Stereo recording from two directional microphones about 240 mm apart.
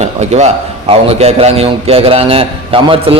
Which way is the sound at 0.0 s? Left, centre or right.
Right.